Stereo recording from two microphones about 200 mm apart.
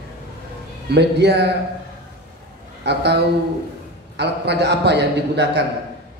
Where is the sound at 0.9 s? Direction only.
55° right (ahead or behind).